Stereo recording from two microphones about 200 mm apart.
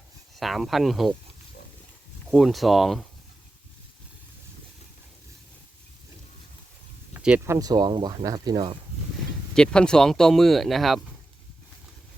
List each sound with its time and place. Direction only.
0.3 s speech: centre (ahead or behind)
2.3 s speech: centre (ahead or behind)
7.1 s speech: 5° right (ahead or behind)
9.6 s speech: 5° left (ahead or behind)